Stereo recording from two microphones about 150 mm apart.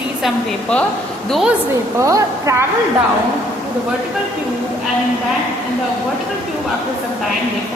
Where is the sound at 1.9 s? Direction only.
20° right (ahead or behind).